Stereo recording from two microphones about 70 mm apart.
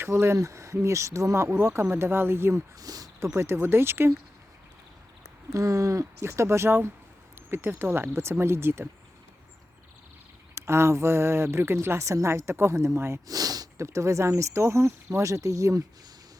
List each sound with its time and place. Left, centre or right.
0.0 s speech: right
2.7 s speech: right
3.2 s speech: right
5.5 s speech: right
10.5 s speech: right
13.2 s sniff: right
13.7 s speech: right